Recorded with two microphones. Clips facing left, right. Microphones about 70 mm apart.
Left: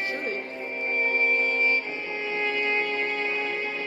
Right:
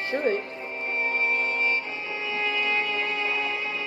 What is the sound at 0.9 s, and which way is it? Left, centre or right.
Violin, left.